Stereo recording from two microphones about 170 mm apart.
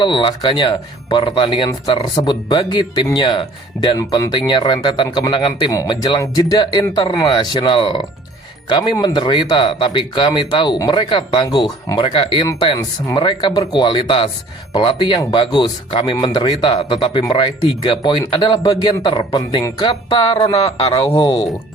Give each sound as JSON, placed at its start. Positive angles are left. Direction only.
{"t": 0.0, "sound": "speech", "side_deg": 30}